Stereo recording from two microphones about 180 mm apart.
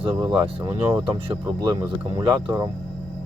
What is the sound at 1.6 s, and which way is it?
Speech, 25° right (ahead or behind).